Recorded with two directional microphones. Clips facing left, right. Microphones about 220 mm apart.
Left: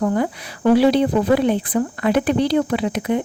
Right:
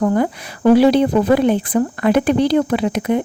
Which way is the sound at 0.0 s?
45° right (ahead or behind).